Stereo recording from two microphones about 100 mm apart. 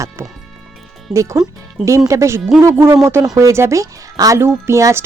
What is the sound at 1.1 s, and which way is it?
Speech, 30° right (ahead or behind).